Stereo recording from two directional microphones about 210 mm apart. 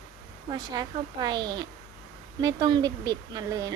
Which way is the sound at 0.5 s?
20° right (ahead or behind).